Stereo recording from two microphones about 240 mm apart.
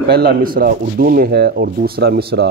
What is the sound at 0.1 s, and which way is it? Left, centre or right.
Speech, right.